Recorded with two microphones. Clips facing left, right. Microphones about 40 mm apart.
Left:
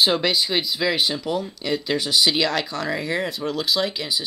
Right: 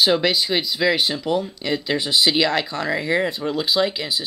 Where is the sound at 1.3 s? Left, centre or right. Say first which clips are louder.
Right 2 dB; right.